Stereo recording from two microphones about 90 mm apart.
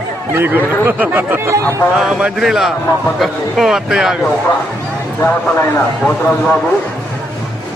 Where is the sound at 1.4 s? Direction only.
40° right (ahead or behind).